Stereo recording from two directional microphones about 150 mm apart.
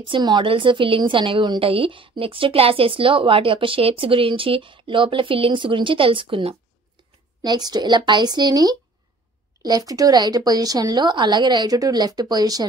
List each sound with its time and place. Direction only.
0.0 s a woman's voice: 30° right (ahead or behind)